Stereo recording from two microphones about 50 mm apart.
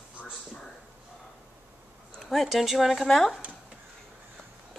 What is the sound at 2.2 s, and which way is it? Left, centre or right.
Speech, centre.